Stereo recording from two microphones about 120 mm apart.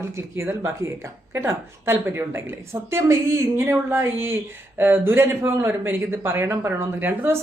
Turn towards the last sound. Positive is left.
turn(degrees=-15)  # may be behind; listen again after turning